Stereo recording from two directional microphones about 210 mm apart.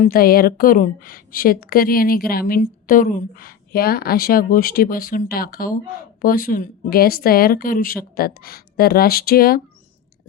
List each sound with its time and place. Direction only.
0.0 s a woman's voice: 45° left (ahead or behind)